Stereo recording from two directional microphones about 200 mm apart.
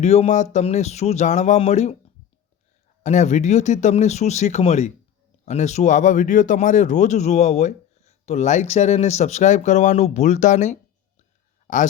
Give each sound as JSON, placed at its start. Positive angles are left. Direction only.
{"t": 0.0, "sound": "speech", "side_deg": 35}
{"t": 3.0, "sound": "speech", "side_deg": 35}